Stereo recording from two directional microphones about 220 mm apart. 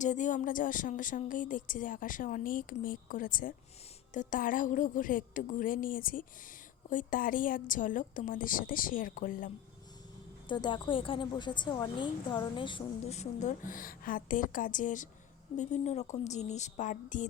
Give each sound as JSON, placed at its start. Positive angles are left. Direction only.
{"t": 0.0, "sound": "speech", "side_deg": 35}
{"t": 10.5, "sound": "a woman's voice", "side_deg": 20}